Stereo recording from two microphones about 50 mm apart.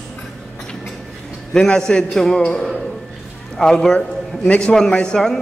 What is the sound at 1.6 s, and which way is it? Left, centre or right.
A man's voice, centre.